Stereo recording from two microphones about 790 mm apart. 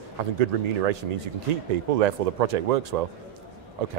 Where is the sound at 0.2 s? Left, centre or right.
Right.